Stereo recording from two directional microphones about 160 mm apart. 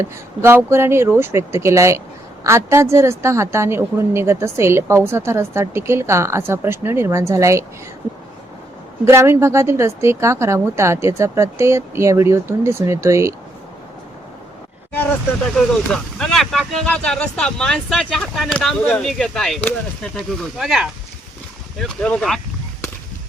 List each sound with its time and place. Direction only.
0.0 s a woman's voice: 15° right (ahead or behind)
9.0 s a woman's voice: 15° right (ahead or behind)
15.5 s speech: 5° left (ahead or behind)